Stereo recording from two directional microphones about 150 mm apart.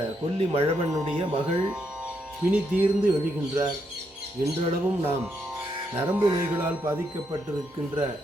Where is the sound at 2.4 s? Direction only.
10° right (ahead or behind).